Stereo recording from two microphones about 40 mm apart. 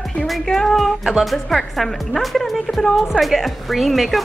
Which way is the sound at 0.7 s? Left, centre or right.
Centre.